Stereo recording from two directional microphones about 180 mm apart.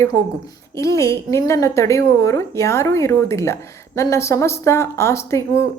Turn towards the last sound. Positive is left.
turn(degrees=15)  # may be behind; listen again after turning